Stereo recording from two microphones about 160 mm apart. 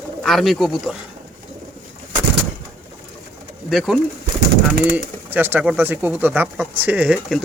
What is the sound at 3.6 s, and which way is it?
Speech, centre (ahead or behind).